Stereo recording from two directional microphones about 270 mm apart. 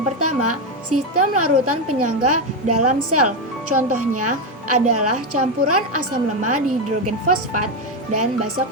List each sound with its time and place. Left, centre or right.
0.2 s speech: right